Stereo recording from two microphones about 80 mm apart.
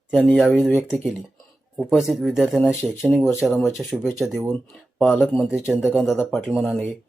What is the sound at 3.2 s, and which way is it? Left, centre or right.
Speech, left.